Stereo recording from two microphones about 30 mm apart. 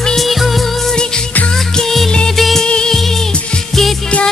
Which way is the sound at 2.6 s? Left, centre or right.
Left.